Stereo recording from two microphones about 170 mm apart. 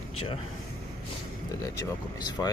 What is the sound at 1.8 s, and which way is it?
Speech, 20° left (ahead or behind).